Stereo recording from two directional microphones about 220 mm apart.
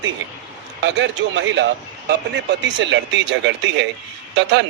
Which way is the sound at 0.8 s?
55° right (ahead or behind).